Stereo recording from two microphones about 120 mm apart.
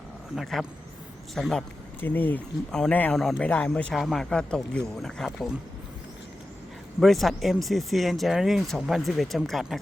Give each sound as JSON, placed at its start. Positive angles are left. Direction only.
{"t": 0.3, "sound": "speech", "side_deg": 0}
{"t": 2.0, "sound": "speech", "side_deg": 15}
{"t": 3.4, "sound": "speech", "side_deg": 10}
{"t": 3.9, "sound": "speech", "side_deg": 0}
{"t": 7.0, "sound": "speech", "side_deg": 0}